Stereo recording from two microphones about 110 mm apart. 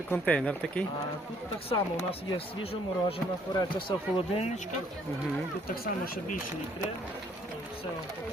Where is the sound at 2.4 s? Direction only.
60° left (ahead or behind).